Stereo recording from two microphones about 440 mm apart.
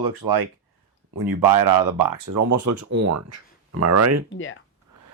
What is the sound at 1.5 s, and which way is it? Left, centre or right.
Speech, right.